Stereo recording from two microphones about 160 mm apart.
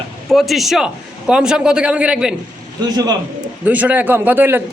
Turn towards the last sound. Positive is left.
turn(degrees=-15)  # may be behind; listen again after turning